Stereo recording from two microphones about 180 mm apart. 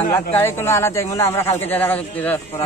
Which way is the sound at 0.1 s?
15° left (ahead or behind).